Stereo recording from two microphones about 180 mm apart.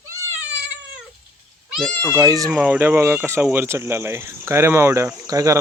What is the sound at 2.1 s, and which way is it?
Cricket, 20° right (ahead or behind).